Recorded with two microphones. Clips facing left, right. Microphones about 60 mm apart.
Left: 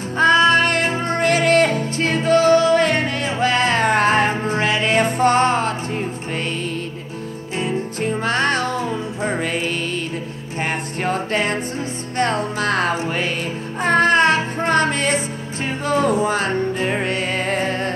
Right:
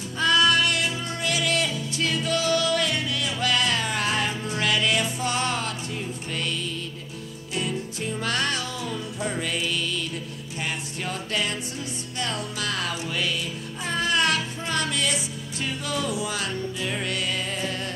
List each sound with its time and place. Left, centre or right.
0.2 s music: left
7.5 s music: left